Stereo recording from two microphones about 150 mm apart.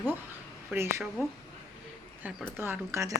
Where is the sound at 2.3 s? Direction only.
15° right (ahead or behind).